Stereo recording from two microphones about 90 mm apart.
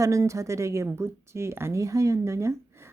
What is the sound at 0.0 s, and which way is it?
A woman's voice, 35° right (ahead or behind).